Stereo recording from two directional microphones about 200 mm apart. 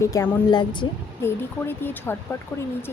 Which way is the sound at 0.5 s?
25° left (ahead or behind).